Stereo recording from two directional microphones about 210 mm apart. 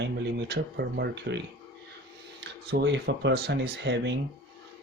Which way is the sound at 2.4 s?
55° right (ahead or behind).